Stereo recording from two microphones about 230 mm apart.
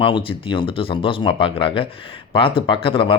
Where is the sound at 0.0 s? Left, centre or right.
Left.